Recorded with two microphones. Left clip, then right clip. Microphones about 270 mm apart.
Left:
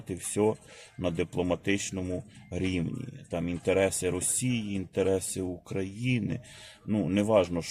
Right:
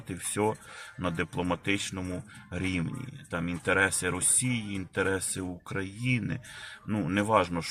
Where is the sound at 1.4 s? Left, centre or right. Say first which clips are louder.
Left 1 dB; right.